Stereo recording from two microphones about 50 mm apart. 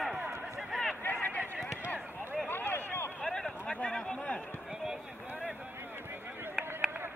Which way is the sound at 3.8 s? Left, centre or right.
Centre.